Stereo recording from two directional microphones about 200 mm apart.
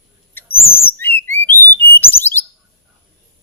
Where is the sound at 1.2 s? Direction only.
10° left (ahead or behind).